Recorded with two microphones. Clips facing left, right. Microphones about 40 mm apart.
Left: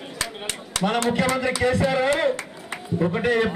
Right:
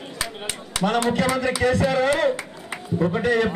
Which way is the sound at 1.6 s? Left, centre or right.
Centre.